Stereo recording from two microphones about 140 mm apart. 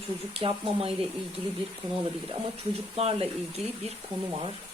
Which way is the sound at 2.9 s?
45° right (ahead or behind).